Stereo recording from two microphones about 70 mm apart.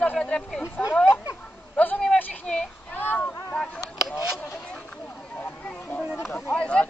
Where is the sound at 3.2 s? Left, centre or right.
Centre.